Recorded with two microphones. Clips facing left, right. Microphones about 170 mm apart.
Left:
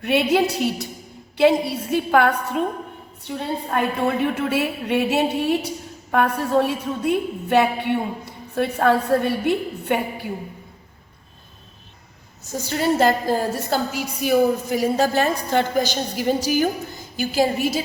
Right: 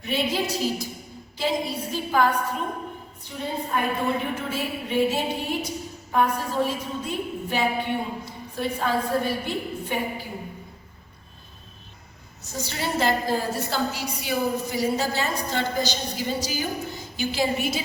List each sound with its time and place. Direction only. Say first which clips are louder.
0.0 s a woman's voice: left 7 dB; 70° left (ahead or behind)
12.6 s a woman's voice: left 7 dB; 45° left (ahead or behind)
17.2 s a woman's voice: left 5 dB; 45° left (ahead or behind)